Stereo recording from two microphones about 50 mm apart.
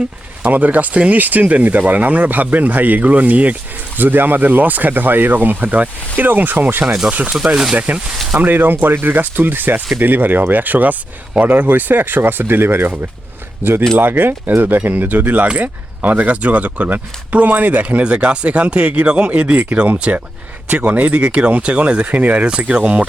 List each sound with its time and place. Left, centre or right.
0.4 s speech: right
6.8 s speech: centre
7.8 s speech: right